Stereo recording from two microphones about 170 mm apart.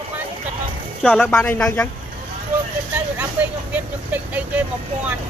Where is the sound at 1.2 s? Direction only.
10° left (ahead or behind).